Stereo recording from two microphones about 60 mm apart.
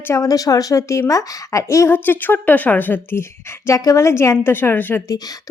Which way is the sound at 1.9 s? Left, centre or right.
Left.